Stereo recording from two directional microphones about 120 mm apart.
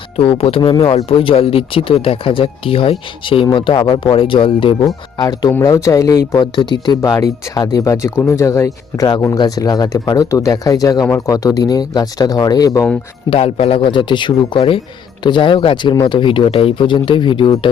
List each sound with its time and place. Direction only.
0.2 s speech: 55° left (ahead or behind)
5.1 s speech: 35° left (ahead or behind)
13.3 s speech: 55° left (ahead or behind)